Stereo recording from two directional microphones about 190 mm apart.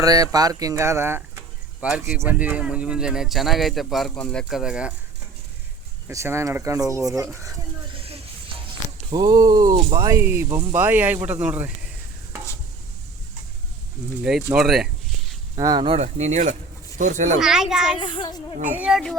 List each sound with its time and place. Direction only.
0.0 s speech: 20° right (ahead or behind)
6.1 s speech: 15° right (ahead or behind)
9.1 s speech: 20° right (ahead or behind)
14.2 s speech: 5° right (ahead or behind)
14.5 s a sound: centre (ahead or behind)
15.5 s speech: 20° right (ahead or behind); by 17.2 s 40° right (ahead or behind)
17.4 s speech: 5° right (ahead or behind)
18.0 s a child's voice: 25° left (ahead or behind)
18.6 s speech: 10° right (ahead or behind)